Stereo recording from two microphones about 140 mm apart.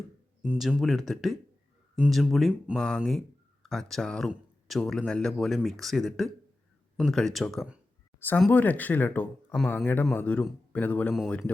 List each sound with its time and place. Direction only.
0.4 s speech: 10° right (ahead or behind)
8.4 s speech: 10° left (ahead or behind)
11.1 s speech: centre (ahead or behind)